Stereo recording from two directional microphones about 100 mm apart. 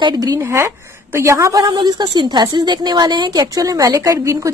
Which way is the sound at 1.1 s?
30° right (ahead or behind).